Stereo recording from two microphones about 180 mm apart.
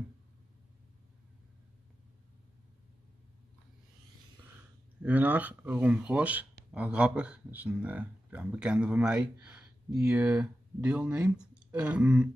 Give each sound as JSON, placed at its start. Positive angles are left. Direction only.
{"t": 5.0, "sound": "speech", "side_deg": -10}